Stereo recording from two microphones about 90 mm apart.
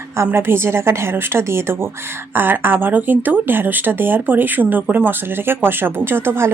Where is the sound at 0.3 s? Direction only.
25° right (ahead or behind).